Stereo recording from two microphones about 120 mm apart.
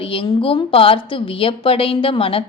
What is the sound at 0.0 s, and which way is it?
A woman's voice, 50° left (ahead or behind).